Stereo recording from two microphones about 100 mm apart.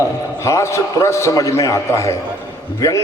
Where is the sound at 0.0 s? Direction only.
30° left (ahead or behind).